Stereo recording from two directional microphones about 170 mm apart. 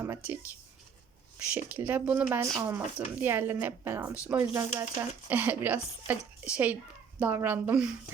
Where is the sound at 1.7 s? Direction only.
10° right (ahead or behind).